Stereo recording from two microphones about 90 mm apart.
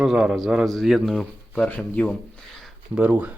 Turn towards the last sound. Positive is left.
turn(degrees=-15)  # may be behind; listen again after turning